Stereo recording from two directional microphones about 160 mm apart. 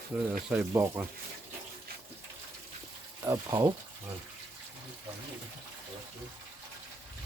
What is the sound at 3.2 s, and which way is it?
Speech, 20° right (ahead or behind).